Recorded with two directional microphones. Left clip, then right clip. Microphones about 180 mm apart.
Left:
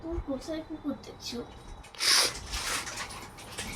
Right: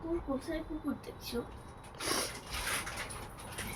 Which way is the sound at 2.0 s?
20° left (ahead or behind).